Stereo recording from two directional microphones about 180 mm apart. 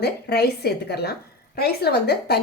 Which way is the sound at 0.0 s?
65° left (ahead or behind).